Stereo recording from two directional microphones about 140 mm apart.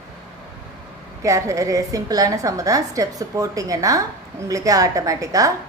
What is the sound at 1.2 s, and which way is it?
A woman's voice, 25° right (ahead or behind).